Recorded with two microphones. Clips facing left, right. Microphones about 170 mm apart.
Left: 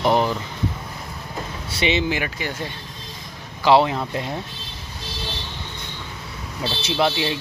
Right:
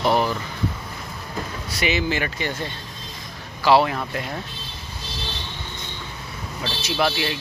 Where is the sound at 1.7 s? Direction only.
25° left (ahead or behind).